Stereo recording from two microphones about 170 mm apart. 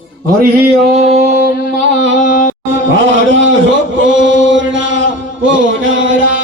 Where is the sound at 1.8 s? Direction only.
90° right.